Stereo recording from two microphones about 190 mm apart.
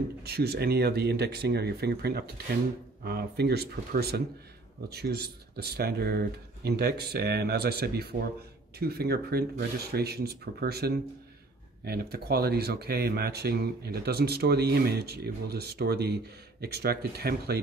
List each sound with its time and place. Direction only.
0.2 s speech: 55° right (ahead or behind)